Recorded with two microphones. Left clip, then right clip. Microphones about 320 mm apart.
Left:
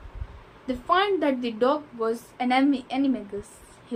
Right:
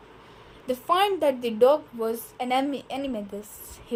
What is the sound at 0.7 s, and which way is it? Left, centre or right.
A woman's voice, right.